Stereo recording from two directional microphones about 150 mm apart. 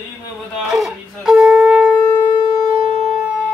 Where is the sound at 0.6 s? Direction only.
Centre (ahead or behind).